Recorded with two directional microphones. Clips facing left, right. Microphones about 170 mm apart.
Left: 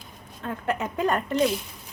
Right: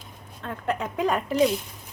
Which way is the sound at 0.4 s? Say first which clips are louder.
Left 1 dB; 5° left (ahead or behind).